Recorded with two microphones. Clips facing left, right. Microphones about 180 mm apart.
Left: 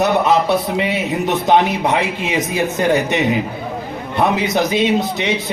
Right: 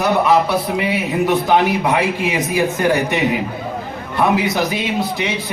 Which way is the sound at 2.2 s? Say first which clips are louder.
Right 1 dB; 20° left (ahead or behind).